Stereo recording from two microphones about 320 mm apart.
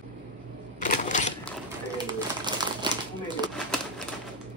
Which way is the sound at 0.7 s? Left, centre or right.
Left.